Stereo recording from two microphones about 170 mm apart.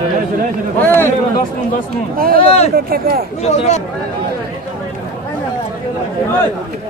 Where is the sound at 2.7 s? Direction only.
65° right (ahead or behind).